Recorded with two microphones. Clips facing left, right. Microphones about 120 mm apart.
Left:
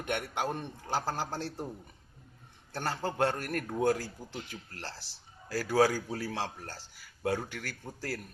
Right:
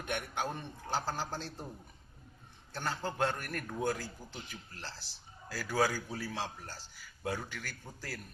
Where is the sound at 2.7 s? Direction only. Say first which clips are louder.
Left 3 dB; 65° left (ahead or behind).